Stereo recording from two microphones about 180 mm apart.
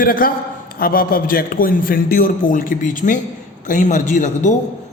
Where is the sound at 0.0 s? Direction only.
50° left (ahead or behind).